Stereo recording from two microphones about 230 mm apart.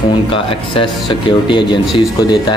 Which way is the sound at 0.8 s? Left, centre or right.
Left.